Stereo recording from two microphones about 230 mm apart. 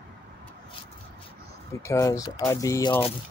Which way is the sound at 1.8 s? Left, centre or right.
Centre.